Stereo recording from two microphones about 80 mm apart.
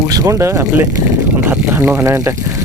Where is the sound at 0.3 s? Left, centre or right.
Right.